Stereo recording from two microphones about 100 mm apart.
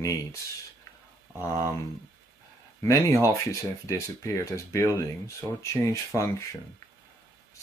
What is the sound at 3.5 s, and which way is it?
Speech, 35° left (ahead or behind).